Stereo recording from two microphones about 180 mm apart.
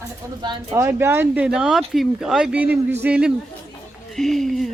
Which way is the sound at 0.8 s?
15° right (ahead or behind).